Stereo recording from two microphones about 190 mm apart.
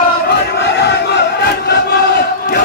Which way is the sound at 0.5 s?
65° left (ahead or behind).